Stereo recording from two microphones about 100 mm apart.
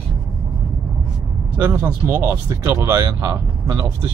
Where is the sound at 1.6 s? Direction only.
20° right (ahead or behind).